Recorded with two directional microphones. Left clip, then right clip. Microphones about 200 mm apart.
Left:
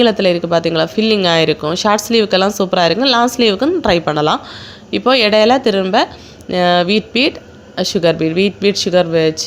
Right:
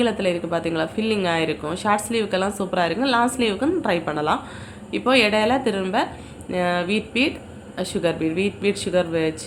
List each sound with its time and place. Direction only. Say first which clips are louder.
0.0 s speech: left 9 dB; 40° left (ahead or behind)